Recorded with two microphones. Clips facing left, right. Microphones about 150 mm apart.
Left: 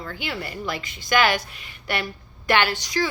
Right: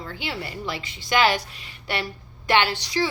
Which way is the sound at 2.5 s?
25° right (ahead or behind).